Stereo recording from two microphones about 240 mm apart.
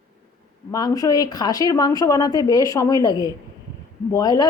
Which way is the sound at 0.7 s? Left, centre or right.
Centre.